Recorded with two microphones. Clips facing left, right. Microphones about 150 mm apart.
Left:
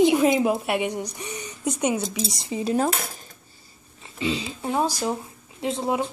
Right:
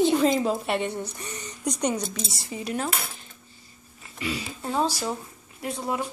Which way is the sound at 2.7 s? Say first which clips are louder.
Left 6 dB; 40° left (ahead or behind).